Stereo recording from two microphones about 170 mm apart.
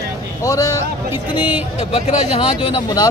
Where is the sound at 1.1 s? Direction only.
10° right (ahead or behind).